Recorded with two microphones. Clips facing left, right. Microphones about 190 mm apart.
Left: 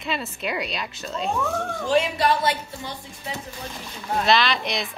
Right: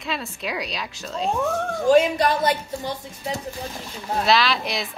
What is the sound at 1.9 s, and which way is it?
Speech, 45° right (ahead or behind).